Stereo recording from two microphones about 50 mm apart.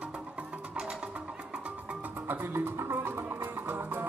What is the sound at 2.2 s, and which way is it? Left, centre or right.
Music, right.